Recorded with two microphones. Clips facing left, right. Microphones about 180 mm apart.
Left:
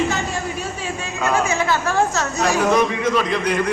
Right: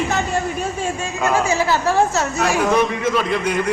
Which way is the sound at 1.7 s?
35° right (ahead or behind).